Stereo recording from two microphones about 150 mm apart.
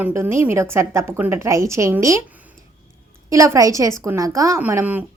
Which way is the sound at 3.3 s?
20° right (ahead or behind).